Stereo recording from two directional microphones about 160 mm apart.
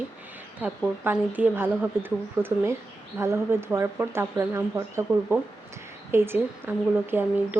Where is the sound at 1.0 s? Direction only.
10° right (ahead or behind).